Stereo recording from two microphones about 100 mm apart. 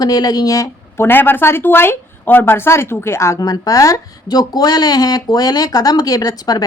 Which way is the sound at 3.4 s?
40° left (ahead or behind).